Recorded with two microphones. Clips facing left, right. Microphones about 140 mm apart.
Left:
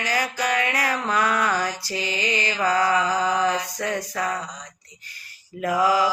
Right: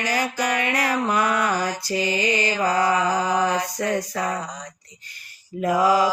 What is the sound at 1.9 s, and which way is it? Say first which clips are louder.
Mantra: right 5 dB; 50° right (ahead or behind).